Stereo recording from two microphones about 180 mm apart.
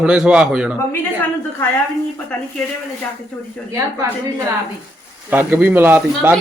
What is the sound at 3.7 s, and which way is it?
Speech, 15° right (ahead or behind).